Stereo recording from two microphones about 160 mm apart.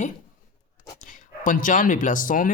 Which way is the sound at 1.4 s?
55° left (ahead or behind).